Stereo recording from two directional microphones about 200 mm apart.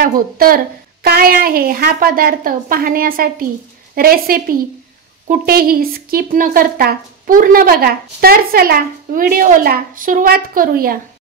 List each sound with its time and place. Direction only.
0.0 s speech: 45° right (ahead or behind)